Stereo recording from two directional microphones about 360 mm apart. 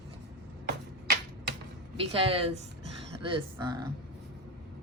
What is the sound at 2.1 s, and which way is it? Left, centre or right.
Speech, centre.